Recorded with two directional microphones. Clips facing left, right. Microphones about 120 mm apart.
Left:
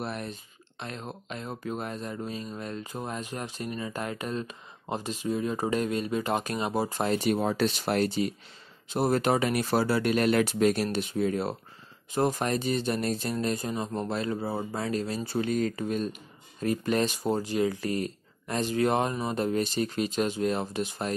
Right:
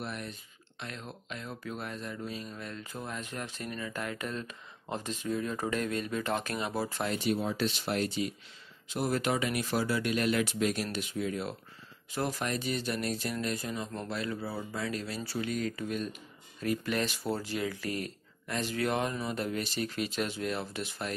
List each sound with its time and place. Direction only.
0.0 s speech: 35° left (ahead or behind)
3.2 s speech: 15° left (ahead or behind)
7.2 s speech: 55° left (ahead or behind)
8.9 s speech: 30° left (ahead or behind); by 10.4 s 50° left (ahead or behind)
10.4 s speech: 35° left (ahead or behind)
17.0 s speech: 20° left (ahead or behind)
17.6 s speech: 30° left (ahead or behind)